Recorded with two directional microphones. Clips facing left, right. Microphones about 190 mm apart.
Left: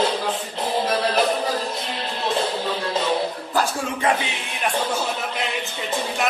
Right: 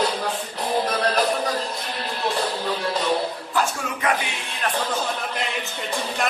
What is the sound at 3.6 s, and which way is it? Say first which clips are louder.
Speech: left 2 dB; 25° left (ahead or behind).